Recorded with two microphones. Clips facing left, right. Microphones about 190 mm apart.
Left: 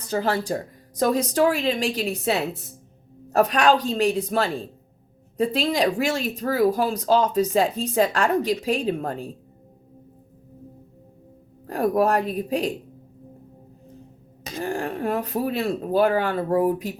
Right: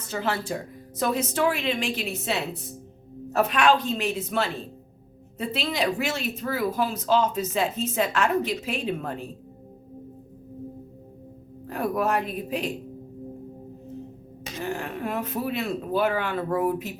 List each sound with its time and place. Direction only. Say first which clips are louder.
0.1 s speech: left 5 dB; 35° left (ahead or behind)
3.3 s speech: left 3 dB; 40° left (ahead or behind)
5.5 s speech: left 2 dB; 40° left (ahead or behind)
11.7 s speech: left 5 dB; 35° left (ahead or behind)
14.4 s speech: left 4 dB; 35° left (ahead or behind)